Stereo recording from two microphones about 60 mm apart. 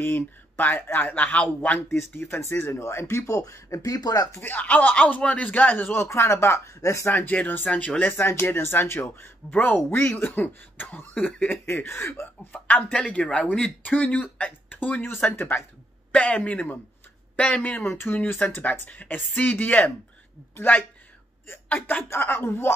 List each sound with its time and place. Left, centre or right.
0.0 s speech: left
1.9 s speech: left
4.3 s speech: left
6.0 s speech: left
7.1 s speech: left
8.2 s speech: left
9.5 s speech: left
11.4 s speech: left
12.5 s speech: left
12.9 s speech: centre
16.1 s speech: centre
17.8 s speech: left